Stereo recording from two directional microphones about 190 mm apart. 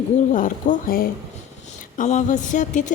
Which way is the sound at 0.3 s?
45° left (ahead or behind).